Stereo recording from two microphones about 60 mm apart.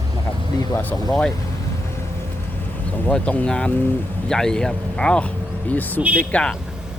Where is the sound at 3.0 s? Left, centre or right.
Left.